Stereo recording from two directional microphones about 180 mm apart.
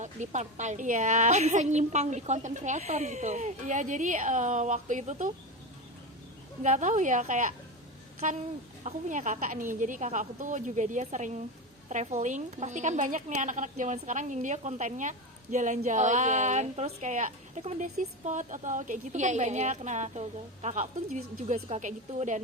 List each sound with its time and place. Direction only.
0.0 s a woman's voice: 40° right (ahead or behind)
6.6 s a woman's voice: 40° right (ahead or behind)